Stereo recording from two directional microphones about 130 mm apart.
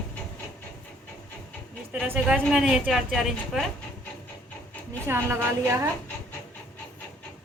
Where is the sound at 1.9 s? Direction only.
10° right (ahead or behind).